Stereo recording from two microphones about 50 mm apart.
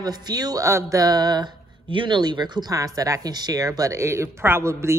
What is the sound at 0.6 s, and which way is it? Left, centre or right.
Speech, right.